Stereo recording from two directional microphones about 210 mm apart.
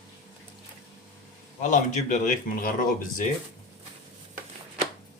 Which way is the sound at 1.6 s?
35° left (ahead or behind).